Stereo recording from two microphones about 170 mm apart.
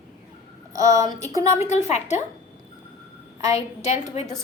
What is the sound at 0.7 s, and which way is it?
Speech, 20° right (ahead or behind).